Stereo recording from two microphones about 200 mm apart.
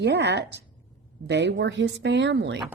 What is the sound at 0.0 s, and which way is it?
Speech, 55° right (ahead or behind).